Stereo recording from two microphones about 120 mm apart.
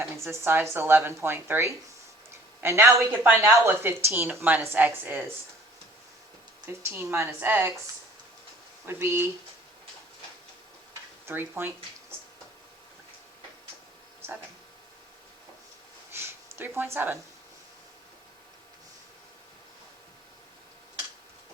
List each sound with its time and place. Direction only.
0.0 s a woman's voice: 20° right (ahead or behind)
6.7 s speech: 20° right (ahead or behind)
8.9 s speech: 20° right (ahead or behind)
11.3 s speech: 20° right (ahead or behind)
16.1 s a sound: 20° right (ahead or behind)